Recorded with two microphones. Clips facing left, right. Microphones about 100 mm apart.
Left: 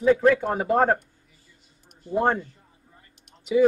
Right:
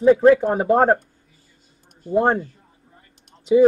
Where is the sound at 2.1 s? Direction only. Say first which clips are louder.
Right 4 dB; 30° right (ahead or behind).